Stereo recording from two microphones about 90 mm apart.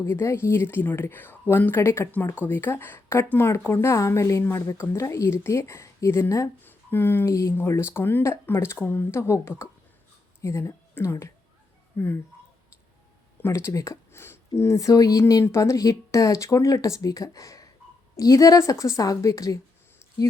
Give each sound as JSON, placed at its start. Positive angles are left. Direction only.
{"t": 0.0, "sound": "a woman's voice", "side_deg": 30}
{"t": 6.6, "sound": "a woman's voice", "side_deg": 25}
{"t": 13.4, "sound": "speech", "side_deg": 30}